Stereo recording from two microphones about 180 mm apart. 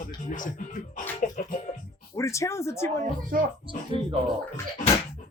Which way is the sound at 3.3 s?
50° right (ahead or behind).